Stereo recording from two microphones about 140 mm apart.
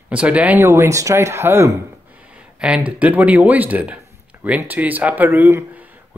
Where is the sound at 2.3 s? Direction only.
10° right (ahead or behind).